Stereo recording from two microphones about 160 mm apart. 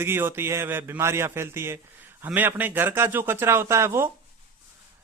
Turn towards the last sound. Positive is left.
turn(degrees=-15)  # may be behind; listen again after turning